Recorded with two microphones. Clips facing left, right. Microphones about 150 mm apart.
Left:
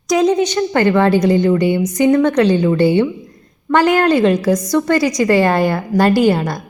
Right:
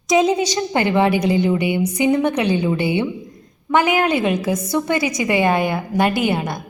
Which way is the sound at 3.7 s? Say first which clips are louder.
Left 4 dB; 5° right (ahead or behind).